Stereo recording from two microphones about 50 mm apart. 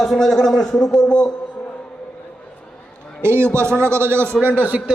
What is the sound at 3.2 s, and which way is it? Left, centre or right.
A man's voice, right.